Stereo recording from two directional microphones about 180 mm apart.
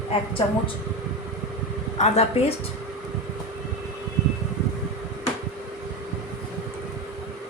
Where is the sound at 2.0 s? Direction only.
35° left (ahead or behind).